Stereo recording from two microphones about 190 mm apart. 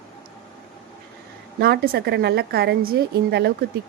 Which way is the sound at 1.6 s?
55° right (ahead or behind).